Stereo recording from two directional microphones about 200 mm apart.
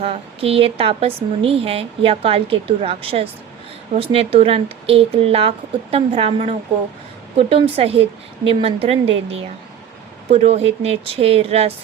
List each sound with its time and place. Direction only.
0.0 s a woman's voice: 30° right (ahead or behind)